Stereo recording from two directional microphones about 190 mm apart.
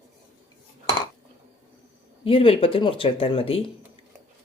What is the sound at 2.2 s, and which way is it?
Speech, 30° left (ahead or behind).